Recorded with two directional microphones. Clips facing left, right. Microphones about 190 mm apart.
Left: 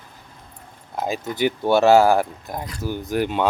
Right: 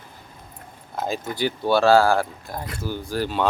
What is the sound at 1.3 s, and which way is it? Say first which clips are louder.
Speech: left 3 dB; 20° left (ahead or behind).